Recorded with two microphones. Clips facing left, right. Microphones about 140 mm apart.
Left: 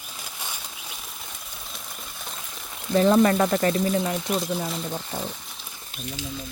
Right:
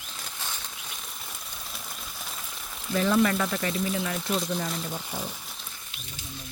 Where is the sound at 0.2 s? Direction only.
10° left (ahead or behind).